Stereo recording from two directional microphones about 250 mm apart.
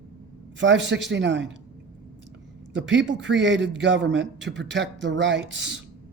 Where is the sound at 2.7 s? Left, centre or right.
Right.